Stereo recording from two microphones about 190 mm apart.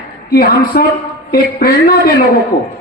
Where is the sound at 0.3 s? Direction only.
55° left (ahead or behind).